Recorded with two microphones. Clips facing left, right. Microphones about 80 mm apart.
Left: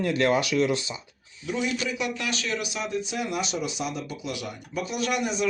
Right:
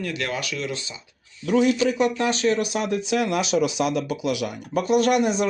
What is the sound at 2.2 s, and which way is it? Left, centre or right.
Speech, right.